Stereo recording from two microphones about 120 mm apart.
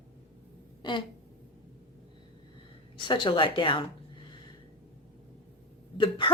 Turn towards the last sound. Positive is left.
turn(degrees=45)  # may be behind; listen again after turning